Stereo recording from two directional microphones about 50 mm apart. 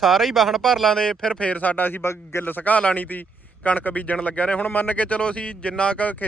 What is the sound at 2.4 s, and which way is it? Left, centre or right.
A man's voice, left.